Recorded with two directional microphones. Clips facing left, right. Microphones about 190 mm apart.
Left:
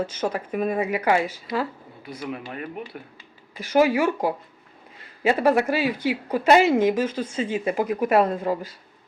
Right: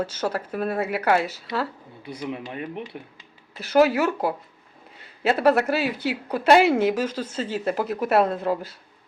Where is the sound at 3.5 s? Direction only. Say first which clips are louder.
Right 1 dB; 10° left (ahead or behind).